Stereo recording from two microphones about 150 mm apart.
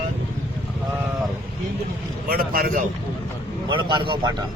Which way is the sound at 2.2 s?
80° right.